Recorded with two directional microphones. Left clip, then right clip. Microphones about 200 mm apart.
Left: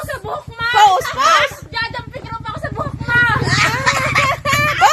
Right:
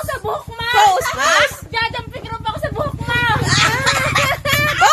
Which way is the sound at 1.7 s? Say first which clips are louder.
Right 2 dB; 30° right (ahead or behind).